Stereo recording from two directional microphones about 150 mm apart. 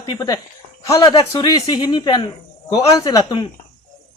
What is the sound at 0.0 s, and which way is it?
Speech, 25° left (ahead or behind).